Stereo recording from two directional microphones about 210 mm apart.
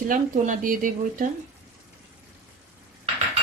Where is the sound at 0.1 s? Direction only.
40° right (ahead or behind).